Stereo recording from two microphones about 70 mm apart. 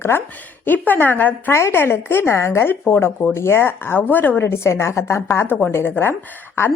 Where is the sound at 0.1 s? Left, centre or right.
Left.